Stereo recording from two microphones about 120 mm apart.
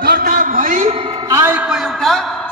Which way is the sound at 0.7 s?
85° right.